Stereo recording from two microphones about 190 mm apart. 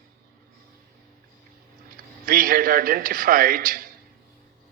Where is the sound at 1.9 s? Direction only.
45° right (ahead or behind).